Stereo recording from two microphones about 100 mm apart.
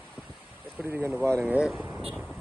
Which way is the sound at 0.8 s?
20° right (ahead or behind).